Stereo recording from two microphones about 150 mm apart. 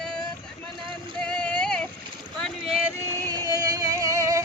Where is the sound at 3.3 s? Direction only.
25° right (ahead or behind).